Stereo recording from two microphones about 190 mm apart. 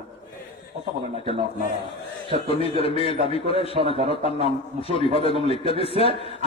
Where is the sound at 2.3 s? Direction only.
30° left (ahead or behind).